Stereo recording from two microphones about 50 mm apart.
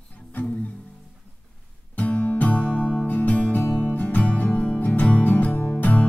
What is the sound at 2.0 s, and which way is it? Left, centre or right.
Music, left.